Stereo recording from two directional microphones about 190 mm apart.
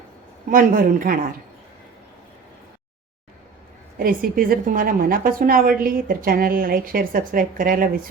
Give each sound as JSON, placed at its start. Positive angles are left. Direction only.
{"t": 0.5, "sound": "a woman's voice", "side_deg": -45}
{"t": 3.9, "sound": "a woman's voice", "side_deg": -50}